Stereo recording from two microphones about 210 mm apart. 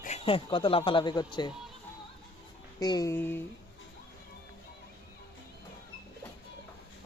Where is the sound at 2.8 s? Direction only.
20° left (ahead or behind).